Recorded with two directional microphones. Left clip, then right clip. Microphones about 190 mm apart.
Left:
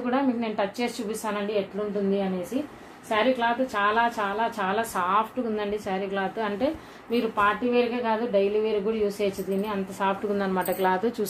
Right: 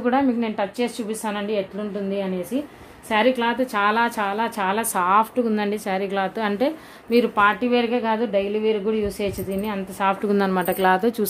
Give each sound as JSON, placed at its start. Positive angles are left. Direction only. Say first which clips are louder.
{"t": 0.0, "sound": "a woman's voice", "louder": "right 5 dB", "side_deg": -40}
{"t": 3.1, "sound": "a woman's voice", "louder": "right 4 dB", "side_deg": -55}